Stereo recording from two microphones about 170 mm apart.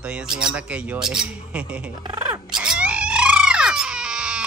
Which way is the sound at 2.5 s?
5° right (ahead or behind).